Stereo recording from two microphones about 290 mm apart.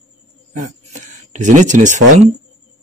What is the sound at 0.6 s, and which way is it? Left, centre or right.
Speech, right.